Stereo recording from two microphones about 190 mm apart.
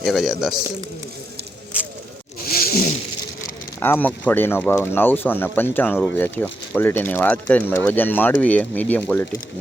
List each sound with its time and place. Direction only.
0.0 s speech: centre (ahead or behind)
2.5 s zipper: 50° left (ahead or behind)
3.8 s speech: 10° left (ahead or behind)